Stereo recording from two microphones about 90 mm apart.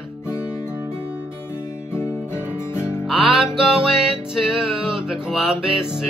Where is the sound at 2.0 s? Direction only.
30° left (ahead or behind).